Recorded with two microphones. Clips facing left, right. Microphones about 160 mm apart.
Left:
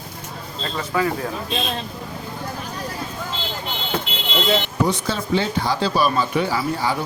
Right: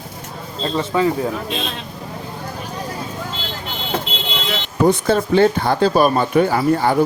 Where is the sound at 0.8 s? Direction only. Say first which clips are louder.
Right 4 dB; 25° right (ahead or behind).